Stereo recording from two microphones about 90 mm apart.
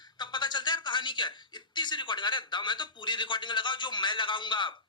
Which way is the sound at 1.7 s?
60° left (ahead or behind).